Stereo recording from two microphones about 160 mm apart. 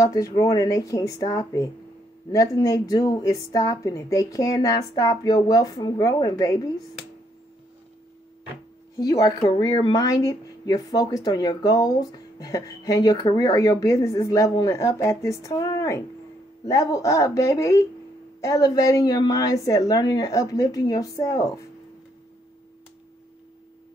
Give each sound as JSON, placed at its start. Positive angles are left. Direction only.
{"t": 0.0, "sound": "speech", "side_deg": 20}
{"t": 8.9, "sound": "speech", "side_deg": 20}